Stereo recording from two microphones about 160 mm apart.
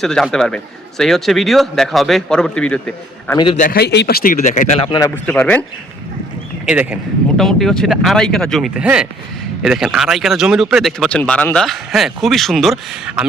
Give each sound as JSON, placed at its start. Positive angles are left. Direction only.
{"t": 0.0, "sound": "speech", "side_deg": 5}
{"t": 3.5, "sound": "speech", "side_deg": 55}
{"t": 3.8, "sound": "speech", "side_deg": 90}
{"t": 4.9, "sound": "a man's voice", "side_deg": 20}
{"t": 5.2, "sound": "a man's voice", "side_deg": 10}
{"t": 6.7, "sound": "speech", "side_deg": -10}
{"t": 7.3, "sound": "speech", "side_deg": 0}